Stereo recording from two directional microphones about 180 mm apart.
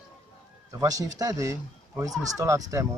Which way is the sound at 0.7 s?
20° right (ahead or behind).